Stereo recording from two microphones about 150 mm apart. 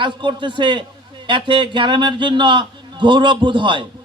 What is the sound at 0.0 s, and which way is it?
A man's voice, 30° right (ahead or behind).